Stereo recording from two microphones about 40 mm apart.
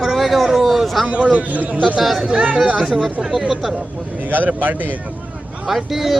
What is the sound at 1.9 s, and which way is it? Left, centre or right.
Speech, centre.